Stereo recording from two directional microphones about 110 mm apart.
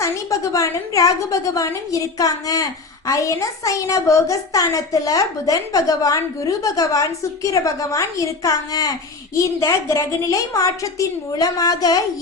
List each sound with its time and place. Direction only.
0.0 s a woman's voice: 30° left (ahead or behind)